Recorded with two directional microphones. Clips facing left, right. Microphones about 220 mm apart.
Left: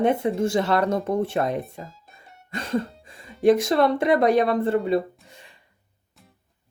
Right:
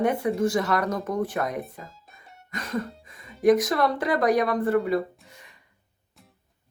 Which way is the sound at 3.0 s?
30° left (ahead or behind).